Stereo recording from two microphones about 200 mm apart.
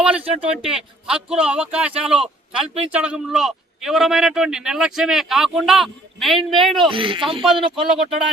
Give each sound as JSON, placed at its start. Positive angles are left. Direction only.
{"t": 0.0, "sound": "a man's voice", "side_deg": -5}
{"t": 6.8, "sound": "speech", "side_deg": -25}
{"t": 7.4, "sound": "a man's voice", "side_deg": 0}